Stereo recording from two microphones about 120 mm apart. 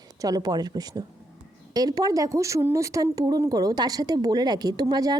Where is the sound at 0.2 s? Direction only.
30° right (ahead or behind).